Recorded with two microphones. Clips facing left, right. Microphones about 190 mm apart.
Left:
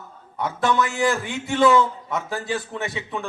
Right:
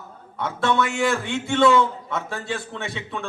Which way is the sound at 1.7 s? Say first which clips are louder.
Left 1 dB; 15° left (ahead or behind).